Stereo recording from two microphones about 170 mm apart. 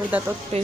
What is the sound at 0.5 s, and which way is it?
Speech, 35° right (ahead or behind).